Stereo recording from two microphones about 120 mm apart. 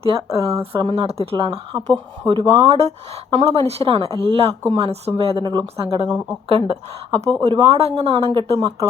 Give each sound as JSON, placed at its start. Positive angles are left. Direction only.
{"t": 0.0, "sound": "speech", "side_deg": -50}
{"t": 2.6, "sound": "speech", "side_deg": -60}
{"t": 7.3, "sound": "speech", "side_deg": -35}
{"t": 7.8, "sound": "speech", "side_deg": -60}